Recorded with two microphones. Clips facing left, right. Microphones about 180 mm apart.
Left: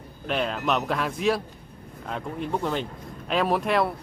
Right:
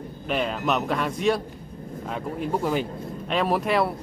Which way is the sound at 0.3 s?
Centre (ahead or behind).